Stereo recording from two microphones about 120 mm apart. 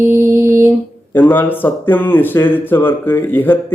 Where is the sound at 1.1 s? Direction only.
15° left (ahead or behind).